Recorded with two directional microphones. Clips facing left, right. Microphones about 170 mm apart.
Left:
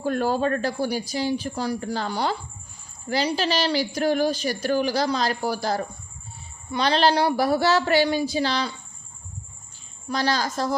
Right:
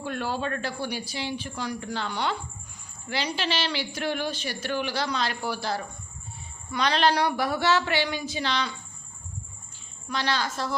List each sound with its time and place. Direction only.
0.0 s a woman's voice: 40° left (ahead or behind)
6.7 s a woman's voice: 30° left (ahead or behind)
10.1 s a woman's voice: 40° left (ahead or behind)